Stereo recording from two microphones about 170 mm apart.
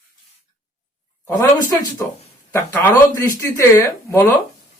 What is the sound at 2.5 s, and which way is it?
Speech, 10° left (ahead or behind).